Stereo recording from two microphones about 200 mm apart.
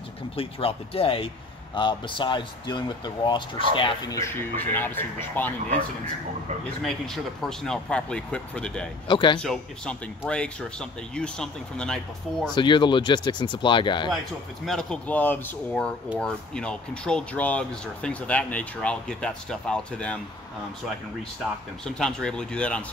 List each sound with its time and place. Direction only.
0.4 s speech: 30° left (ahead or behind); by 5.5 s 10° left (ahead or behind)
6.8 s speech: 5° left (ahead or behind)
9.0 s speech: 25° left (ahead or behind)
9.4 s speech: centre (ahead or behind)
12.5 s speech: 25° left (ahead or behind)
14.7 s speech: 5° left (ahead or behind)
21.8 s speech: 5° left (ahead or behind)